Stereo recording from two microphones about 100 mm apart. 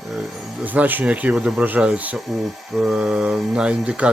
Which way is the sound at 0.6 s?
15° right (ahead or behind).